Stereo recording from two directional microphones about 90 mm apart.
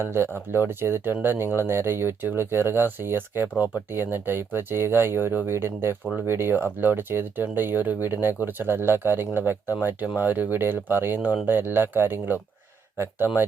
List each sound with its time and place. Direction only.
0.0 s speech: 25° right (ahead or behind)